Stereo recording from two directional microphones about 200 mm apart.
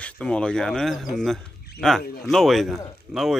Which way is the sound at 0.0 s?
5° left (ahead or behind).